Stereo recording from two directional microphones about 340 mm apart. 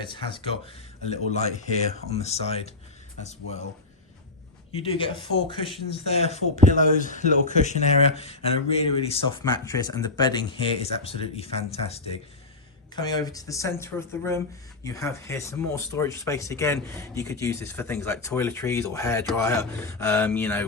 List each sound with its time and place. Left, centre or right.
0.0 s speech: centre
4.8 s speech: centre